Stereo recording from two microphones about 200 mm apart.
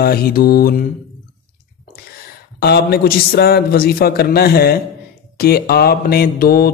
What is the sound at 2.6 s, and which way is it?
Mantra, 50° left (ahead or behind).